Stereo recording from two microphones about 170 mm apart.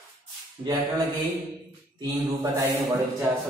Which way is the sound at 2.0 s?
25° right (ahead or behind).